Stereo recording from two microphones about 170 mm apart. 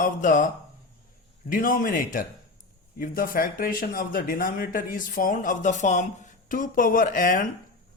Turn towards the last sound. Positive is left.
turn(degrees=55)  # may be behind; listen again after turning